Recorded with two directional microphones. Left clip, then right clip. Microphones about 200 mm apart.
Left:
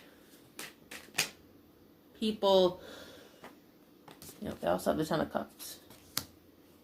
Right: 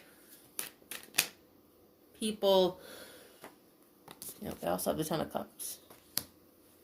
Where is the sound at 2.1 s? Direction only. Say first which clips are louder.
Left 1 dB; 45° right (ahead or behind).